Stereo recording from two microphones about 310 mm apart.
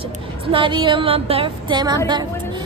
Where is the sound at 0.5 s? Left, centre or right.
Centre.